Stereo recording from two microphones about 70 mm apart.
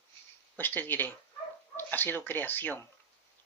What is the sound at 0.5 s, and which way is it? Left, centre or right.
Speech, left.